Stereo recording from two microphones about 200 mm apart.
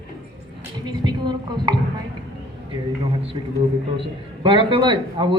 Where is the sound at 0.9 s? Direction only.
20° right (ahead or behind).